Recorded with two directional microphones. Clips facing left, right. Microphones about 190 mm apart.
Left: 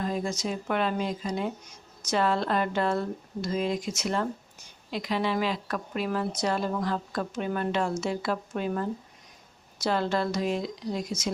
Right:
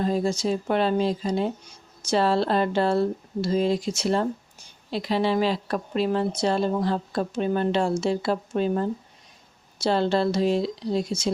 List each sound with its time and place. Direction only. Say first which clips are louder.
0.0 s speech: right 6 dB; 30° right (ahead or behind)